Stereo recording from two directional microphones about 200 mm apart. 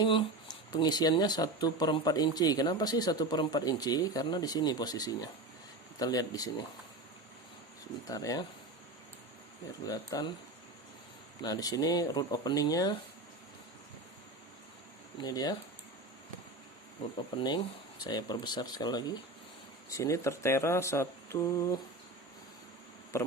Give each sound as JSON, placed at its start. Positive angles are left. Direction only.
{"t": 0.0, "sound": "speech", "side_deg": 25}
{"t": 8.0, "sound": "speech", "side_deg": 15}
{"t": 9.8, "sound": "speech", "side_deg": 20}
{"t": 11.4, "sound": "speech", "side_deg": 20}
{"t": 15.2, "sound": "speech", "side_deg": 20}
{"t": 17.2, "sound": "speech", "side_deg": 25}
{"t": 23.1, "sound": "speech", "side_deg": 15}